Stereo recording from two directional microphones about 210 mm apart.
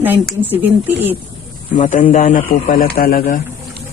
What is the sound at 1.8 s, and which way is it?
A man's voice, 35° left (ahead or behind).